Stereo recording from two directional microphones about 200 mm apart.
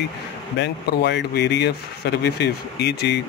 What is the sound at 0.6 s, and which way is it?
Speech, 55° left (ahead or behind).